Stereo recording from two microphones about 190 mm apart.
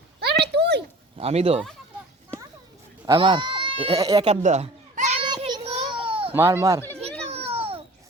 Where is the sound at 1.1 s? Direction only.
35° right (ahead or behind).